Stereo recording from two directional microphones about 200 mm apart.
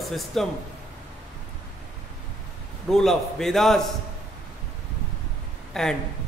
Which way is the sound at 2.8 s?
Centre (ahead or behind).